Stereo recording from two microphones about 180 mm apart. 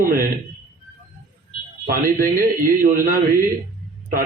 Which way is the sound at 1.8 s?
50° right (ahead or behind).